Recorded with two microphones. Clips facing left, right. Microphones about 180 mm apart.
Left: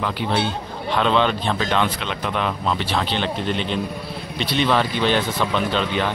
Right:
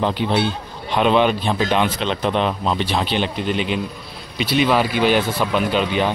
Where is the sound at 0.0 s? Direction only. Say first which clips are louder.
Right 3 dB; 20° right (ahead or behind).